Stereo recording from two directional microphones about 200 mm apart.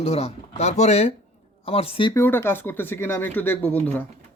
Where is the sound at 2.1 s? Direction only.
10° left (ahead or behind).